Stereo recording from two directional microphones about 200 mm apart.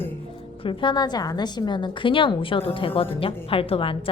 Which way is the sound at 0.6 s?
25° left (ahead or behind).